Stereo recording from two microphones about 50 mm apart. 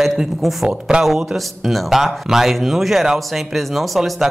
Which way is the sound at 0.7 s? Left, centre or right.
Centre.